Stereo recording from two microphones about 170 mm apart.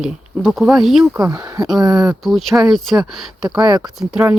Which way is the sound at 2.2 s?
Centre (ahead or behind).